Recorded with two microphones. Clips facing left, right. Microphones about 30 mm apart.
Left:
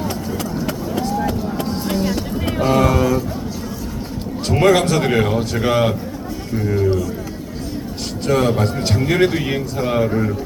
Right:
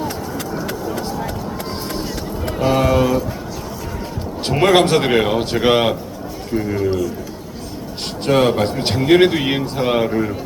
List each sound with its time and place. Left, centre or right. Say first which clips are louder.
2.6 s a sound: right 1 dB; centre
4.7 s a man's voice: right 2 dB; right
6.6 s a man's voice: left 1 dB; centre
8.3 s speech: right 2 dB; right
8.6 s a man's voice: even; right
9.0 s speech: right 5 dB; right
10.1 s a man's voice: even; centre